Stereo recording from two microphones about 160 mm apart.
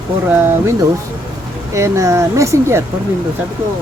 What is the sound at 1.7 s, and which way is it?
Speech, 20° right (ahead or behind).